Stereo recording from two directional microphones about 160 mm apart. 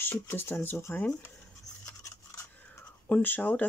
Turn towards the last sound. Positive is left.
turn(degrees=10)  # may be behind; listen again after turning